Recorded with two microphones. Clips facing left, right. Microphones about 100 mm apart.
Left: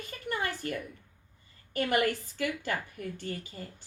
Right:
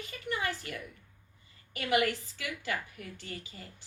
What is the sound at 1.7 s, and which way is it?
A woman's voice, 45° left (ahead or behind).